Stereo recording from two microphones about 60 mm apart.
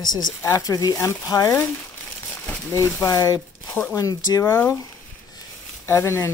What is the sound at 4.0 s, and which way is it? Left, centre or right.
Speech, left.